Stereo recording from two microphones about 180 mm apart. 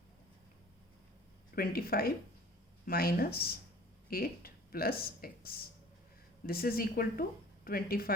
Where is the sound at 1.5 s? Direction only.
55° left (ahead or behind).